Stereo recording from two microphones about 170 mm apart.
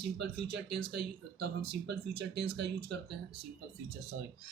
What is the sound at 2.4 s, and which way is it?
Speech, 85° right.